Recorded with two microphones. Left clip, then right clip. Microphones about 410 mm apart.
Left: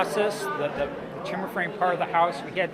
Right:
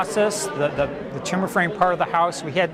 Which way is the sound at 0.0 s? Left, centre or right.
Right.